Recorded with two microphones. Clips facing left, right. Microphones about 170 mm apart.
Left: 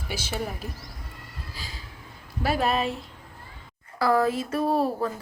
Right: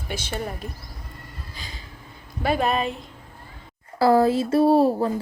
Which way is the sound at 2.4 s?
5° left (ahead or behind).